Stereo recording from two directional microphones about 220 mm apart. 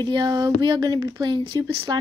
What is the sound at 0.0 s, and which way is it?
Speech, 20° right (ahead or behind).